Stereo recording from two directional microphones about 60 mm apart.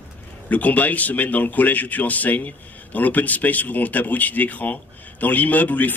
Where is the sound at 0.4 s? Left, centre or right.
Left.